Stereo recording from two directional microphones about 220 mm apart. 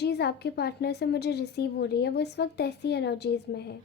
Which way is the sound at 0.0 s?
50° left (ahead or behind).